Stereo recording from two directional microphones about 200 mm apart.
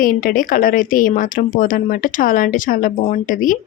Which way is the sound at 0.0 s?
45° left (ahead or behind).